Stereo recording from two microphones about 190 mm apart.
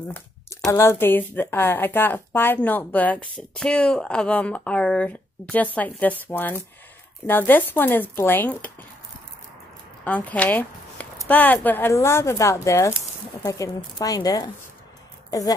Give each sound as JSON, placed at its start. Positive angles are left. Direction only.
{"t": 0.1, "sound": "speech", "side_deg": 10}
{"t": 10.0, "sound": "speech", "side_deg": 5}